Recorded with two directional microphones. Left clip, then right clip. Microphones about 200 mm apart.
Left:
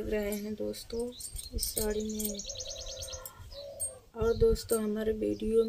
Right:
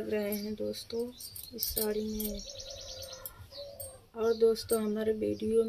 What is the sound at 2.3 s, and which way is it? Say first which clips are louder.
Bird: left 3 dB; 50° left (ahead or behind).